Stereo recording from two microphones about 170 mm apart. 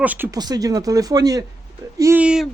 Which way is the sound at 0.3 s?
25° right (ahead or behind).